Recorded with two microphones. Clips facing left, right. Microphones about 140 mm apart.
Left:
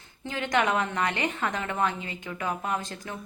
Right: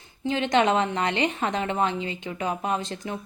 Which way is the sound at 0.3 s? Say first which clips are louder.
Right 5 dB; 25° right (ahead or behind).